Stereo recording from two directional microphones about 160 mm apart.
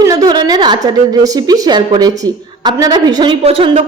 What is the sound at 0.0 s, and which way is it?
A woman's voice, 25° right (ahead or behind).